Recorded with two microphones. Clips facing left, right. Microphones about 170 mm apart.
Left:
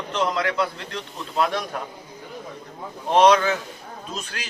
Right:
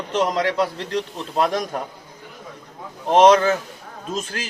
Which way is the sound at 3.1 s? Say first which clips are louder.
Right 3 dB; 40° right (ahead or behind).